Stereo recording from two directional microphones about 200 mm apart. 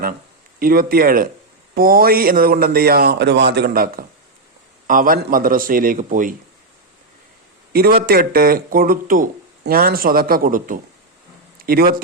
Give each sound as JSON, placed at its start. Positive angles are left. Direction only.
{"t": 0.6, "sound": "speech", "side_deg": -45}
{"t": 7.7, "sound": "speech", "side_deg": -50}